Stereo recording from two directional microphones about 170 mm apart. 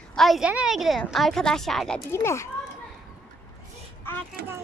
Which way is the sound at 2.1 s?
15° left (ahead or behind).